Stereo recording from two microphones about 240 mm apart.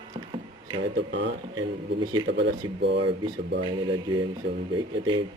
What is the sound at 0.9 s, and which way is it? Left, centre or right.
Speech, right.